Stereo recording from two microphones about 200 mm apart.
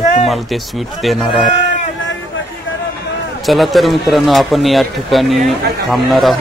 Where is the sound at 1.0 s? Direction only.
Centre (ahead or behind).